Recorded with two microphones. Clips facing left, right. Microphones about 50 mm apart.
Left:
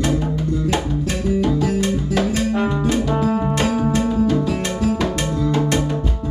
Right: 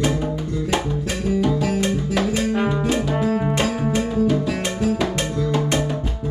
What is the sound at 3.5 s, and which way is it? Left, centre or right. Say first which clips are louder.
Music: left 2 dB; centre.